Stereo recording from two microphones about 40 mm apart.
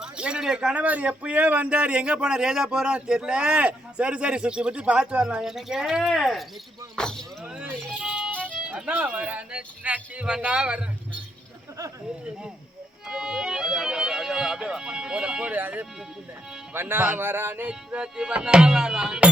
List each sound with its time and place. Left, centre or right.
0.0 s a sound: right
0.4 s speech: centre
0.7 s a man's voice: right
5.4 s speech: centre
6.9 s a sound: centre
7.9 s music: centre
9.0 s speech: right
13.1 s music: centre
16.7 s music: right
17.7 s a man's voice: right